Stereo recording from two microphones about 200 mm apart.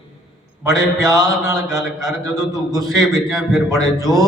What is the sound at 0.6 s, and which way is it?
A man's voice, 15° right (ahead or behind).